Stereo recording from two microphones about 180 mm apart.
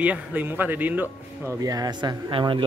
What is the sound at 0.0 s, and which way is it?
Speech, 10° right (ahead or behind).